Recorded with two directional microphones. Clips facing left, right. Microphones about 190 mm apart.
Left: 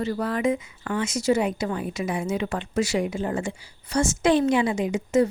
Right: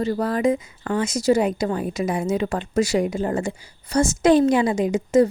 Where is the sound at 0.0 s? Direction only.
35° right (ahead or behind).